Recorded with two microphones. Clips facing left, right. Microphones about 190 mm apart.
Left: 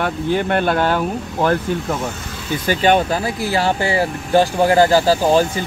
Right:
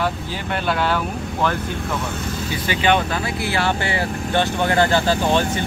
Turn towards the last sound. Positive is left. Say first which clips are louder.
# left 4 dB
turn(degrees=35)  # may be behind; listen again after turning